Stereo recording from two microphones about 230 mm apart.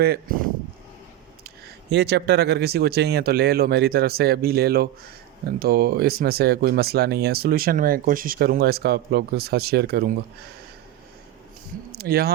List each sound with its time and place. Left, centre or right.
0.0 s speech: right
1.5 s speech: right
11.9 s a sound: right